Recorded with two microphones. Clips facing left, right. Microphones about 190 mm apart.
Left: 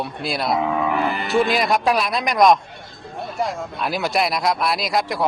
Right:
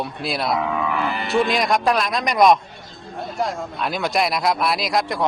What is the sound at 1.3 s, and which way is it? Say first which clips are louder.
Speech: even; centre (ahead or behind).